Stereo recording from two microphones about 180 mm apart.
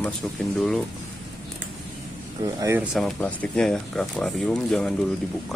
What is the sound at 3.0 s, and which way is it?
Speech, 5° left (ahead or behind).